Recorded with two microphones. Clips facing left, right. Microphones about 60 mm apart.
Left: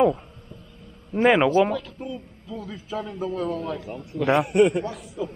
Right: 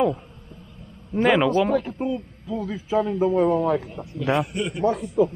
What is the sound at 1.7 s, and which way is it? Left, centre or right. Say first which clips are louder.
Speech: right 6 dB; right.